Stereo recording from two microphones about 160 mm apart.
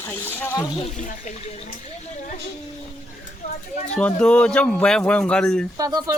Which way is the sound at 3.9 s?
5° left (ahead or behind).